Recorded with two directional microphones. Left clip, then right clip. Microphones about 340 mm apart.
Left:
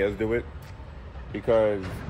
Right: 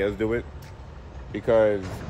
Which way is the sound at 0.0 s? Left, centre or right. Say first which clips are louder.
Even; centre.